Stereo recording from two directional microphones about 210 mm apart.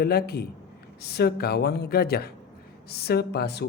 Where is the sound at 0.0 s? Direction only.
45° left (ahead or behind).